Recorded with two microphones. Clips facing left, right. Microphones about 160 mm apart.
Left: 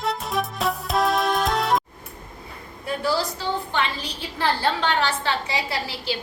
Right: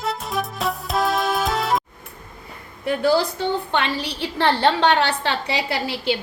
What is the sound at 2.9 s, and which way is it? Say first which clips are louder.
A woman's voice: right 6 dB; 60° right (ahead or behind).